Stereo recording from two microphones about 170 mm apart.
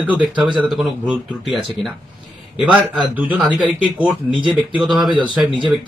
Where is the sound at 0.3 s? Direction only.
30° right (ahead or behind).